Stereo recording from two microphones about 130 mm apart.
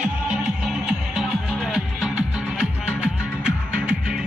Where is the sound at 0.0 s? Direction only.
5° right (ahead or behind).